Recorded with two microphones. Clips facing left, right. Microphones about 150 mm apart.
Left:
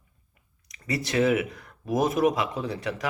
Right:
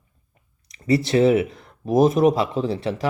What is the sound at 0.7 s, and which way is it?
Speech, 25° right (ahead or behind).